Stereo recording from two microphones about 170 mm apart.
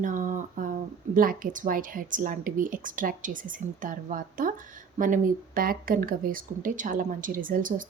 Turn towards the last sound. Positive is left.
turn(degrees=-55)  # may be behind; listen again after turning